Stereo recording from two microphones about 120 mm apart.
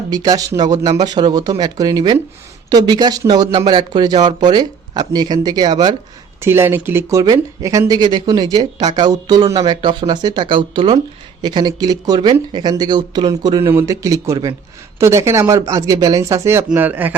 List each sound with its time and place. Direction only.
0.1 s speech: 30° right (ahead or behind)
6.4 s speech: 20° right (ahead or behind); by 13.6 s 35° right (ahead or behind)
13.7 s speech: 25° right (ahead or behind)